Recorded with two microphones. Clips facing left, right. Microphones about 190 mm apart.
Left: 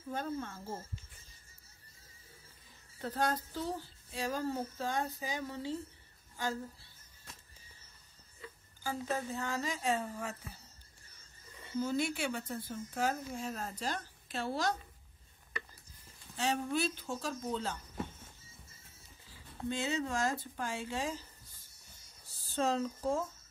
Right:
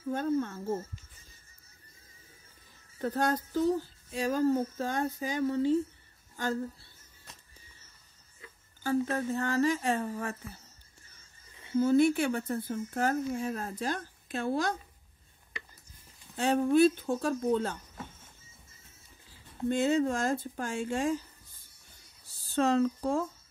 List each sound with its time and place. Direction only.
0.1 s speech: 55° right (ahead or behind)
3.0 s a woman's voice: 50° right (ahead or behind)
8.8 s speech: 65° right (ahead or behind)
11.7 s speech: 55° right (ahead or behind)
16.3 s speech: 55° right (ahead or behind)
19.7 s speech: 50° right (ahead or behind)
22.6 s speech: 70° right (ahead or behind)